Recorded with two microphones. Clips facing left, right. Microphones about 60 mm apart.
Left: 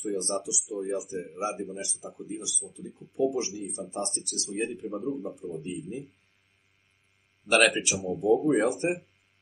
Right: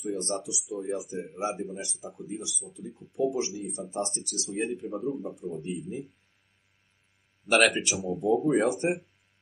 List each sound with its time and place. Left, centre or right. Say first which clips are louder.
0.0 s speech: left 1 dB; centre
7.4 s speech: even; centre